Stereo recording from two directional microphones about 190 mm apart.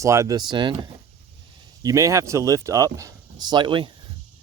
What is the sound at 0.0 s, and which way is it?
Speech, 15° right (ahead or behind).